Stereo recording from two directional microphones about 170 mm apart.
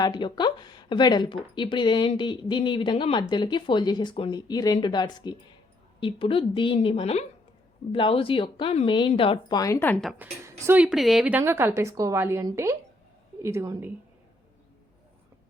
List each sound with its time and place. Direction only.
0.0 s speech: 25° left (ahead or behind)
10.0 s a woman's voice: 5° right (ahead or behind)